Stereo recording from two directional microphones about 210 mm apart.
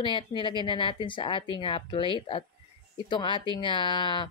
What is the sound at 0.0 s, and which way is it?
Speech, 25° left (ahead or behind).